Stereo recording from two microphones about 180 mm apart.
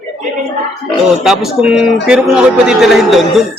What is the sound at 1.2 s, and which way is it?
A man's voice, centre (ahead or behind).